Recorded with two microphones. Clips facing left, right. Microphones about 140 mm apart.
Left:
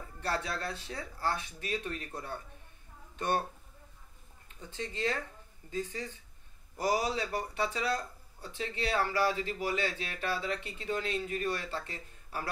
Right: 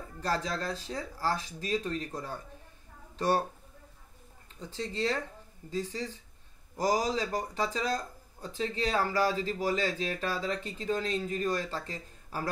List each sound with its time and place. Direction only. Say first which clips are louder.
0.2 s speech: right 3 dB; 35° right (ahead or behind)
4.6 s speech: right 4 dB; 35° right (ahead or behind)